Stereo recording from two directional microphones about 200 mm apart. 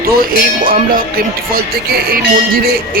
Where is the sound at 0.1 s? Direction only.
45° right (ahead or behind).